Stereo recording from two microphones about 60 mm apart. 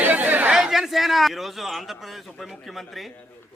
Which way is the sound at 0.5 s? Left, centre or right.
Centre.